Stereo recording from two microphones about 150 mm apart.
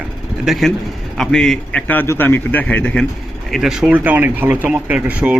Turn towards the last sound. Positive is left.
turn(degrees=-10)  # may be behind; listen again after turning